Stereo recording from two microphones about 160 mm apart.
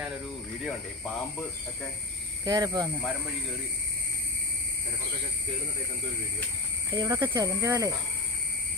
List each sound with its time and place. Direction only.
2.4 s speech: 25° right (ahead or behind)
6.9 s speech: 25° right (ahead or behind)